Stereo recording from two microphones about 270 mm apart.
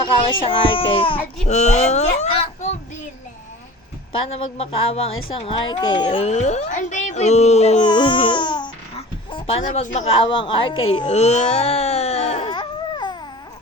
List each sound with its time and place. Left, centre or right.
0.1 s speech: centre
4.3 s a woman's voice: left